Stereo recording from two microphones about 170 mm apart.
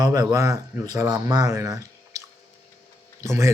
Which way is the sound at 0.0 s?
20° right (ahead or behind).